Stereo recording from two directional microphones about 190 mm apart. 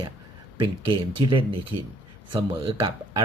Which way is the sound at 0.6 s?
25° right (ahead or behind).